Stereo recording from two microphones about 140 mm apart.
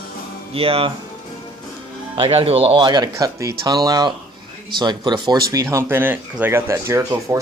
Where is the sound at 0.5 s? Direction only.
45° right (ahead or behind).